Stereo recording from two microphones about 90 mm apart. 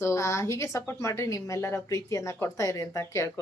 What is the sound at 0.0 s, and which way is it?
A woman's voice, 35° left (ahead or behind).